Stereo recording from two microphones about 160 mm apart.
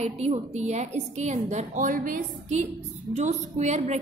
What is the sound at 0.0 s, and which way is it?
A woman's voice, 40° right (ahead or behind).